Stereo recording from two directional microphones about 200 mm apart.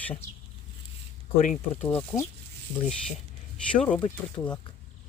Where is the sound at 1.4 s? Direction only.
40° left (ahead or behind).